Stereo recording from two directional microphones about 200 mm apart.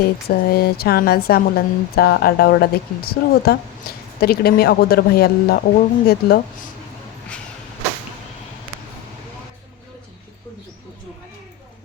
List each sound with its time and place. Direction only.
0.0 s speech: 50° left (ahead or behind)